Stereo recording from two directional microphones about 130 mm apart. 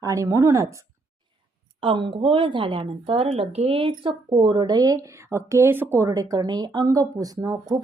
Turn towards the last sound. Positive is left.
turn(degrees=-30)  # may be behind; listen again after turning